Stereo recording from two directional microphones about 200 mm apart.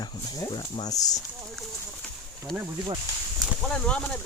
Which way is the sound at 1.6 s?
Centre (ahead or behind).